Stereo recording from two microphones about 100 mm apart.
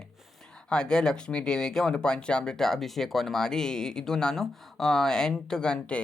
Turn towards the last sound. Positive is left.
turn(degrees=10)  # may be behind; listen again after turning